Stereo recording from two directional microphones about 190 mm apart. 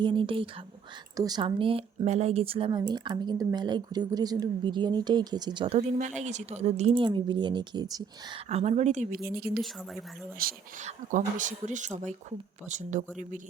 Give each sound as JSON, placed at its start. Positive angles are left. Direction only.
{"t": 0.0, "sound": "speech", "side_deg": -25}
{"t": 8.4, "sound": "speech", "side_deg": -35}
{"t": 10.3, "sound": "speech", "side_deg": -50}